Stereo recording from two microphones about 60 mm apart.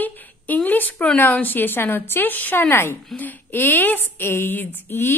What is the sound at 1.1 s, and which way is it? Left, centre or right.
A woman's voice, left.